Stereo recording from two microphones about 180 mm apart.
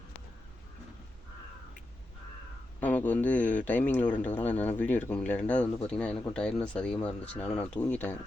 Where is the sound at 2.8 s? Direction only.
10° left (ahead or behind).